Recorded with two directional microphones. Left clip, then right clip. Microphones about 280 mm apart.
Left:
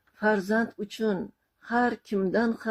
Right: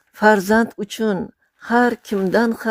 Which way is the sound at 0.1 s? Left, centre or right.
Right.